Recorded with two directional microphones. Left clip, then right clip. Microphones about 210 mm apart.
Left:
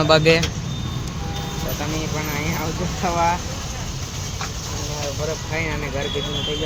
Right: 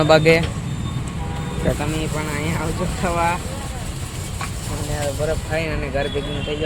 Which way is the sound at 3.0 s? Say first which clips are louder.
Left 1 dB; 5° right (ahead or behind).